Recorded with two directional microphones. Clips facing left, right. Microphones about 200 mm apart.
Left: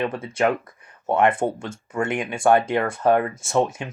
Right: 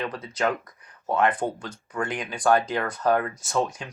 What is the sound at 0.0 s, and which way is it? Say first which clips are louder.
Speech: left 5 dB; 25° left (ahead or behind).